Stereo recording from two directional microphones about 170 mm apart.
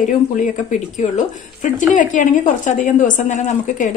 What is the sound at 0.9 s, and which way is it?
A woman's voice, 50° left (ahead or behind).